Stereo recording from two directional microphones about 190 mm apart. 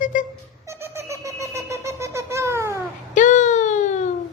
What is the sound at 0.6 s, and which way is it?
Wind instrument, 15° right (ahead or behind).